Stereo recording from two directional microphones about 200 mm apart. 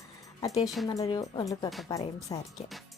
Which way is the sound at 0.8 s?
Centre (ahead or behind).